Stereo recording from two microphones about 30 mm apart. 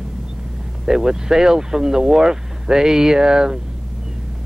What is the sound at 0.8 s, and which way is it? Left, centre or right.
Speech, centre.